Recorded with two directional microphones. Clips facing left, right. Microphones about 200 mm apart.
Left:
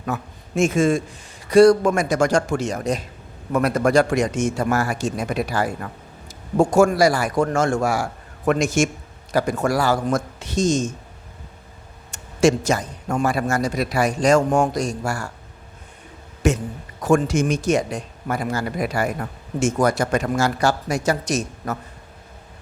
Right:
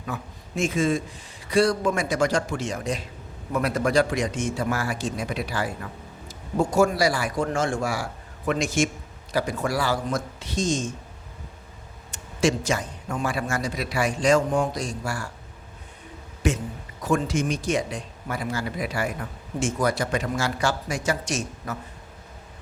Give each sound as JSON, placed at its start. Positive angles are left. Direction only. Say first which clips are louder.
{"t": 0.5, "sound": "speech", "louder": "left 5 dB", "side_deg": 45}
{"t": 12.1, "sound": "speech", "louder": "left 6 dB", "side_deg": 45}
{"t": 16.4, "sound": "speech", "louder": "left 5 dB", "side_deg": 45}